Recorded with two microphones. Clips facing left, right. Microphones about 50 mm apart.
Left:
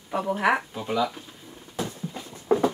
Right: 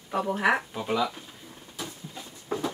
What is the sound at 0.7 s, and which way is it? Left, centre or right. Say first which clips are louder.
Speech: left 1 dB; centre.